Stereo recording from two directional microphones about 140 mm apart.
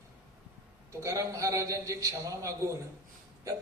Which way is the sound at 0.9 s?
20° right (ahead or behind).